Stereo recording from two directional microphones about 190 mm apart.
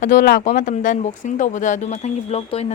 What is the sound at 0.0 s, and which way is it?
Speech, 45° left (ahead or behind).